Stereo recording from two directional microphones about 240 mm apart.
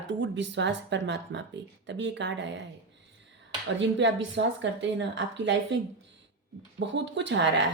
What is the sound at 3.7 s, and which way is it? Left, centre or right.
A woman's voice, right.